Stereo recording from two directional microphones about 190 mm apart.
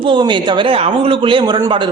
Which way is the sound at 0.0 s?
25° right (ahead or behind).